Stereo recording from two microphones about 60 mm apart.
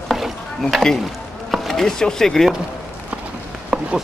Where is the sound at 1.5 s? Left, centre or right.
Centre.